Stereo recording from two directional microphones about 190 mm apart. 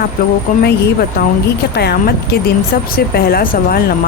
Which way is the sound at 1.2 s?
55° left (ahead or behind).